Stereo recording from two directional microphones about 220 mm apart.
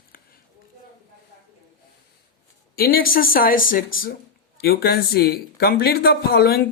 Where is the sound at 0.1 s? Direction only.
40° left (ahead or behind).